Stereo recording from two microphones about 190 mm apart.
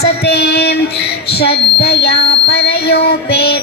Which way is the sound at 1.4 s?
60° left (ahead or behind).